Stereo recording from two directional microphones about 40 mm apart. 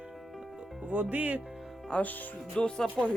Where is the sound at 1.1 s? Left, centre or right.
Right.